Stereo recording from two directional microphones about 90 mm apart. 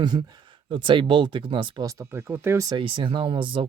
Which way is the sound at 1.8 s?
40° right (ahead or behind).